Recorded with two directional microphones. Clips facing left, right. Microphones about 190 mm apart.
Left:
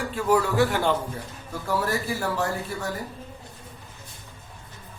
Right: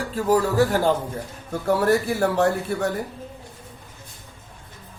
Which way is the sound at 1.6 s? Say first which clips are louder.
Right 7 dB; 60° right (ahead or behind).